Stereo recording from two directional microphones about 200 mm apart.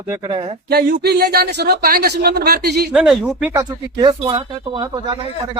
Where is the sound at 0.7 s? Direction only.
50° right (ahead or behind).